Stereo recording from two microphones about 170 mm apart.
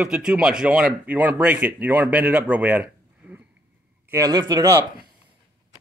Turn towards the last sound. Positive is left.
turn(degrees=-20)  # may be behind; listen again after turning